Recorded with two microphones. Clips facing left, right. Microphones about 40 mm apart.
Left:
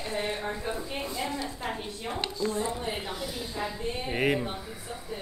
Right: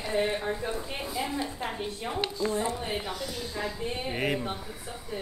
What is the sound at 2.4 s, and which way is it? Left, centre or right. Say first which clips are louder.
Speech: right 1 dB; centre.